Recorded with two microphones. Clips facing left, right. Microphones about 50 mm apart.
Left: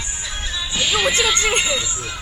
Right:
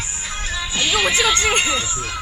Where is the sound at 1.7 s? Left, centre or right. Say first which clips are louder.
Right 1 dB; right.